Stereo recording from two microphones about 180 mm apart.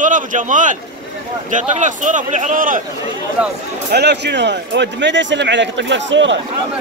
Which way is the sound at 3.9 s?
70° right (ahead or behind).